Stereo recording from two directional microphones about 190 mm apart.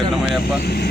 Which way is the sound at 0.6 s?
55° left (ahead or behind).